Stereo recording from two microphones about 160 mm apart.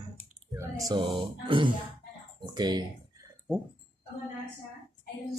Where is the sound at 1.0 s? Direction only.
35° right (ahead or behind).